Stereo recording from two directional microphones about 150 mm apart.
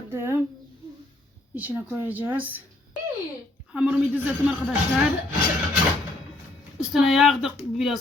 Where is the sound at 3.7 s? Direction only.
5° right (ahead or behind).